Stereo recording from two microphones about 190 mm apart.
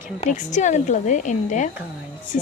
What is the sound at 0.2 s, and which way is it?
Speech, 40° left (ahead or behind).